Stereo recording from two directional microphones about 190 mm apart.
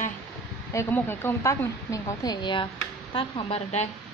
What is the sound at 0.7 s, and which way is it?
A woman's voice, 10° left (ahead or behind).